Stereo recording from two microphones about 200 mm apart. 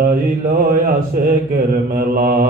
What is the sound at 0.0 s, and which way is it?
Mantra, 45° right (ahead or behind).